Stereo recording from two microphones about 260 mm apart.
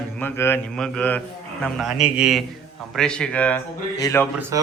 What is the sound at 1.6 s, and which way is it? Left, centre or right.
Speech, centre.